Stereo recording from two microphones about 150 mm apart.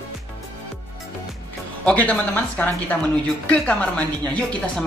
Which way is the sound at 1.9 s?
10° left (ahead or behind).